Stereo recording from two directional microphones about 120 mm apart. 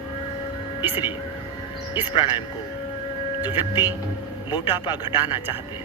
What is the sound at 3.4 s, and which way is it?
Speech, 40° left (ahead or behind).